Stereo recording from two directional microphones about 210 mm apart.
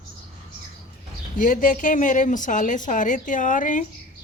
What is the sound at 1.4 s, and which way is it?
A woman's voice, 40° left (ahead or behind).